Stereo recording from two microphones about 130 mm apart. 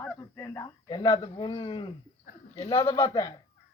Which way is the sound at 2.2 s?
60° left (ahead or behind).